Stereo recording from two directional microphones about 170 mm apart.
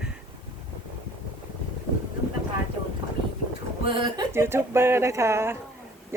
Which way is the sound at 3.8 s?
25° right (ahead or behind).